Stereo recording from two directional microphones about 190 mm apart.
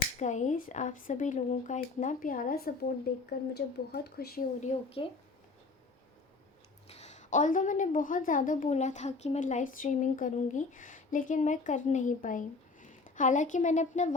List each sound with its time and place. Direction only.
0.2 s a woman's voice: 40° left (ahead or behind); by 4.4 s 55° left (ahead or behind)
4.6 s a woman's voice: 35° left (ahead or behind)
6.8 s a woman's voice: 35° left (ahead or behind)